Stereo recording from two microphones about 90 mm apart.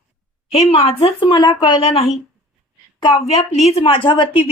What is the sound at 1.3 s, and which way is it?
Speech, 55° left (ahead or behind).